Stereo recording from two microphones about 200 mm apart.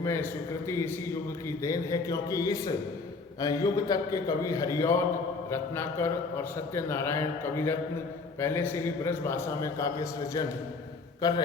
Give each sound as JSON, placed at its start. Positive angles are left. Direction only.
{"t": 0.0, "sound": "a man's voice", "side_deg": 10}